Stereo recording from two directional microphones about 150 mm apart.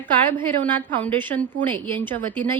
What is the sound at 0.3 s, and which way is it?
A woman's voice, 10° left (ahead or behind).